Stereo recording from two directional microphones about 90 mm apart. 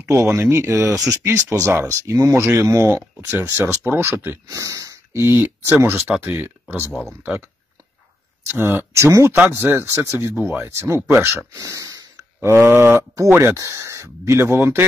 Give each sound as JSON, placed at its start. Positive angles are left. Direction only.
{"t": 0.0, "sound": "speech", "side_deg": -30}
{"t": 4.5, "sound": "speech", "side_deg": -35}
{"t": 8.5, "sound": "speech", "side_deg": -25}
{"t": 12.4, "sound": "speech", "side_deg": -30}
{"t": 13.6, "sound": "speech", "side_deg": -35}